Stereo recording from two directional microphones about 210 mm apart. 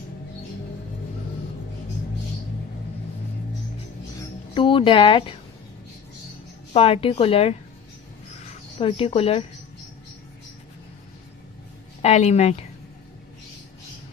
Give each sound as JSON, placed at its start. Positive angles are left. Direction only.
{"t": 4.2, "sound": "music", "side_deg": 25}
{"t": 6.7, "sound": "a woman's voice", "side_deg": 25}
{"t": 8.8, "sound": "a woman's voice", "side_deg": 25}
{"t": 12.0, "sound": "a woman's voice", "side_deg": 30}